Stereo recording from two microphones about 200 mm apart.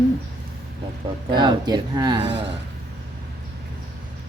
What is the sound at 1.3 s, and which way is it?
Speech, 20° right (ahead or behind).